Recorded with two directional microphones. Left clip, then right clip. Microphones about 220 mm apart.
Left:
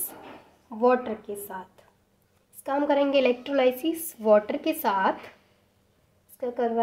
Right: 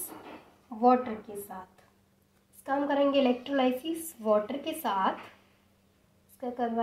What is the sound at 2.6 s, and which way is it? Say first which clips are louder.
A woman's voice: left 3 dB; 50° left (ahead or behind).